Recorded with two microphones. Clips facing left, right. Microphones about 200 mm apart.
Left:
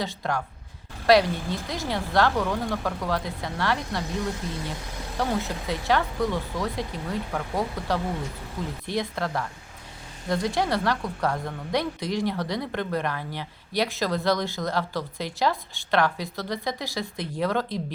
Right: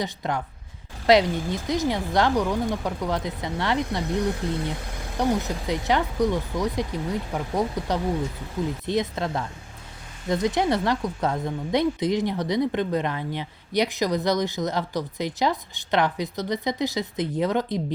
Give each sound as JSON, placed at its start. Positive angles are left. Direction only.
{"t": 0.0, "sound": "speech", "side_deg": -20}
{"t": 4.4, "sound": "speech", "side_deg": -65}
{"t": 5.1, "sound": "speech", "side_deg": -20}